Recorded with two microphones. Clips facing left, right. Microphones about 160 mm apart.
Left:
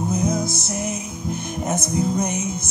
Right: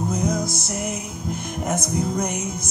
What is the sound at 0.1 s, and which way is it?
Music, 25° left (ahead or behind).